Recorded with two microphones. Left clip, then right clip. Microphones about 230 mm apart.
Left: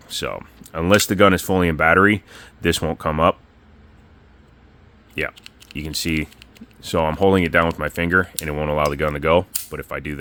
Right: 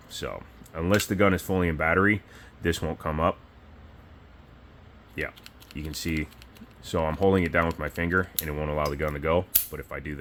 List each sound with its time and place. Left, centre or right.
0.1 s speech: left
5.3 s typing: centre
5.7 s speech: left